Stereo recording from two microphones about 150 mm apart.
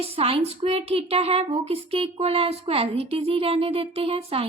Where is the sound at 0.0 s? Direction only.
40° right (ahead or behind).